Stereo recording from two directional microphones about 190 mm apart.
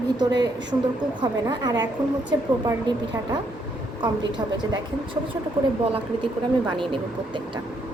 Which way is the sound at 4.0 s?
25° right (ahead or behind).